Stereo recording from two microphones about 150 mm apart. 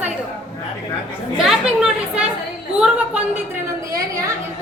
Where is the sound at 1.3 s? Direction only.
5° right (ahead or behind).